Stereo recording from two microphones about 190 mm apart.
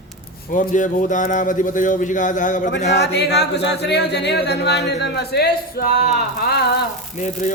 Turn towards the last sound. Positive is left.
turn(degrees=40)  # may be behind; listen again after turning